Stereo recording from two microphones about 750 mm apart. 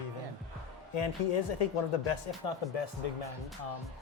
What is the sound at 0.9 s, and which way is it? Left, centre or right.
Speech, left.